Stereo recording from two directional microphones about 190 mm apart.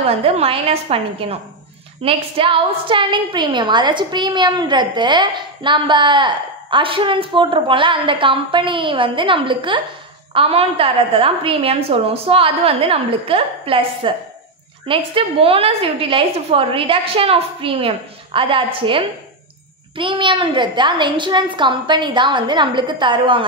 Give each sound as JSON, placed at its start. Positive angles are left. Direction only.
{"t": 0.0, "sound": "a woman's voice", "side_deg": -30}